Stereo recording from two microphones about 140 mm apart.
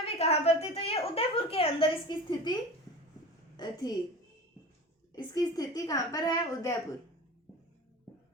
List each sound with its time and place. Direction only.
0.0 s a woman's voice: 45° left (ahead or behind)
3.6 s a woman's voice: 30° left (ahead or behind)
5.1 s a woman's voice: 30° left (ahead or behind)